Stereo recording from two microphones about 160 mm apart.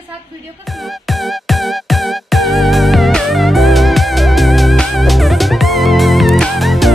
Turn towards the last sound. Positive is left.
turn(degrees=0)  # may be behind; listen again after turning